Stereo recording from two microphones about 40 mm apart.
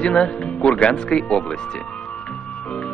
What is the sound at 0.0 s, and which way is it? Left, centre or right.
Speech, left.